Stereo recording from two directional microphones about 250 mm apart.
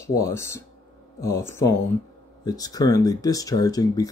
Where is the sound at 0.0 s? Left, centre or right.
Centre.